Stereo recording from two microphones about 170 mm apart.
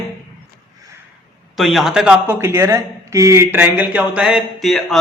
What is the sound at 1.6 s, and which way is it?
A man's voice, centre (ahead or behind).